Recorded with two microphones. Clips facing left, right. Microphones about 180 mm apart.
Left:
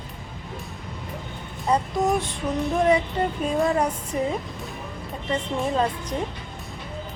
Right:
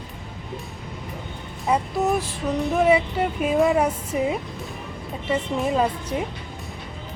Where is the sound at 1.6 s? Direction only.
5° right (ahead or behind).